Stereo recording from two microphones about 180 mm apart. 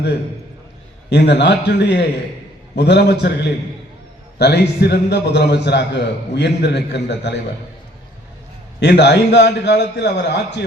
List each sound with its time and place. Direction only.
1.1 s a man's voice: 70° left (ahead or behind)
8.8 s a man's voice: 70° left (ahead or behind)